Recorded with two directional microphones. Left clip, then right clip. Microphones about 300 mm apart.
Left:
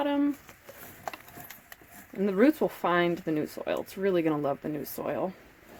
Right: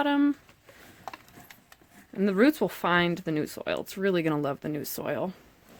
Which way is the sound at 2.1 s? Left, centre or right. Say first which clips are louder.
Right 1 dB; right.